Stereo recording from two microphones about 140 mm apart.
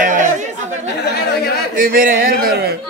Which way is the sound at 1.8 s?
90° right.